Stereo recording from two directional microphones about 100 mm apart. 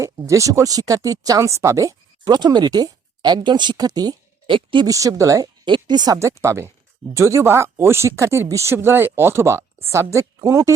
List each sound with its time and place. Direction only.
0.0 s speech: 30° right (ahead or behind); by 4.9 s 55° right (ahead or behind)
4.9 s a woman's voice: 35° right (ahead or behind)
5.6 s speech: 50° right (ahead or behind)
6.1 s a woman's voice: 30° right (ahead or behind)